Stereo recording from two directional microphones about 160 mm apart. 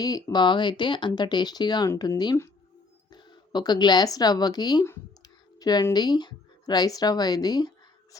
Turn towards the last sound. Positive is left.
turn(degrees=25)  # may be behind; listen again after turning